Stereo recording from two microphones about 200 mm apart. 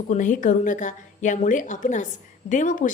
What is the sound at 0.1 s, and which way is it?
A woman's voice, 40° left (ahead or behind).